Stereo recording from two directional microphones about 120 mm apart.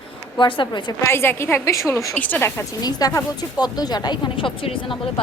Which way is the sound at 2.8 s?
30° left (ahead or behind).